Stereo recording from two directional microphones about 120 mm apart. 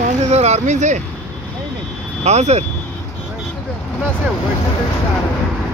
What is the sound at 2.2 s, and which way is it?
Speech, 70° right (ahead or behind).